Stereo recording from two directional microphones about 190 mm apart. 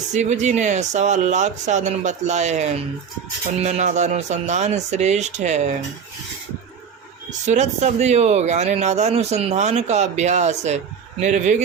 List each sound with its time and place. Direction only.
0.1 s speech: 40° right (ahead or behind)
7.3 s speech: 40° right (ahead or behind)